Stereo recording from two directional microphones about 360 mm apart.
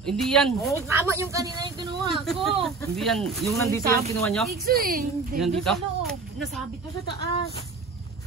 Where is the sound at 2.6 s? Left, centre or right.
Centre.